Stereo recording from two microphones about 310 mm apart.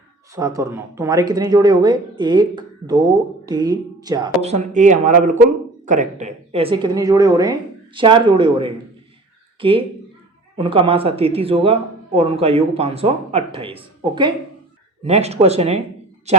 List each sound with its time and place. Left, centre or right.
0.3 s speech: centre